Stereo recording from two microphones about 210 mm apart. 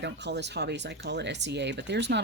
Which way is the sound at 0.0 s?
55° right (ahead or behind).